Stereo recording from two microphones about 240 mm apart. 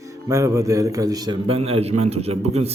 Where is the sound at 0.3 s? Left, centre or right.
Centre.